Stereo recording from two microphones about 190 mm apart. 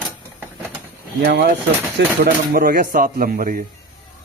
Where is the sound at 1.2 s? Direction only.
50° right (ahead or behind).